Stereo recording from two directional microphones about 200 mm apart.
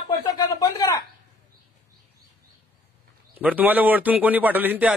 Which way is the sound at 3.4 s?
5° right (ahead or behind).